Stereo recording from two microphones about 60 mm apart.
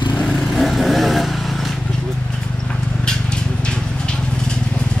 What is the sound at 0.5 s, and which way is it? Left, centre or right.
Vehicle, centre.